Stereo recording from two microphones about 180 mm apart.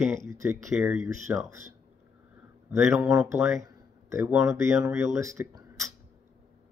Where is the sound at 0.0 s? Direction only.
15° right (ahead or behind).